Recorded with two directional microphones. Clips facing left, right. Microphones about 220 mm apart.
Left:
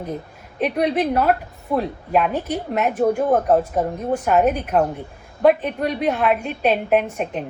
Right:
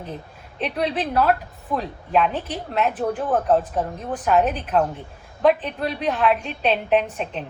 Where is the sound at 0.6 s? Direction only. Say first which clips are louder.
Left 5 dB; 10° left (ahead or behind).